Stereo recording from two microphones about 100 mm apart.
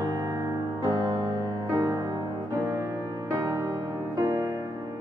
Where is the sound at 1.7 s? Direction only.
25° right (ahead or behind).